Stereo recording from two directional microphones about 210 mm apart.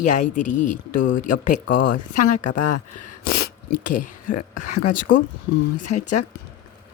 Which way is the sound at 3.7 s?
40° left (ahead or behind).